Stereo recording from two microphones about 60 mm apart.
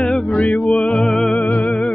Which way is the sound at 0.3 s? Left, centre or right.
Centre.